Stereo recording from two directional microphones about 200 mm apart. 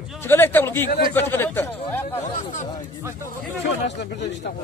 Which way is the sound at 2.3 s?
35° left (ahead or behind).